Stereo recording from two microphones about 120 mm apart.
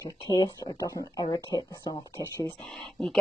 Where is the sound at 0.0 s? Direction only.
40° left (ahead or behind).